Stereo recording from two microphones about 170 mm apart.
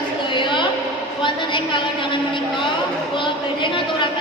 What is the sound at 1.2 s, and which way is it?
A woman's voice, 30° left (ahead or behind).